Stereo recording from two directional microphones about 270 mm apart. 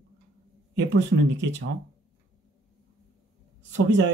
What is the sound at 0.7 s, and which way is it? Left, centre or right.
Speech, right.